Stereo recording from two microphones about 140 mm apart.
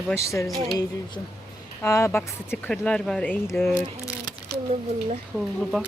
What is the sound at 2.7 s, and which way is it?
Speech, 5° left (ahead or behind).